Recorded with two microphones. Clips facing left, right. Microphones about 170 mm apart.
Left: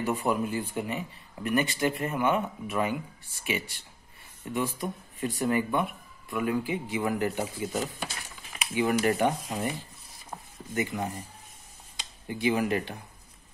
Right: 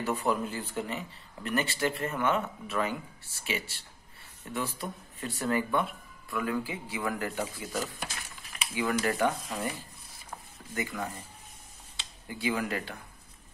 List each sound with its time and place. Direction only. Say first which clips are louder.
0.0 s speech: left 2 dB; 15° left (ahead or behind)
8.7 s speech: left 4 dB; 25° left (ahead or behind)
10.7 s speech: left 4 dB; 20° left (ahead or behind)